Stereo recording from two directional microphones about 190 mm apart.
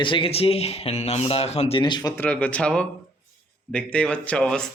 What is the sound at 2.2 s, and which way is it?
Speech, 5° left (ahead or behind).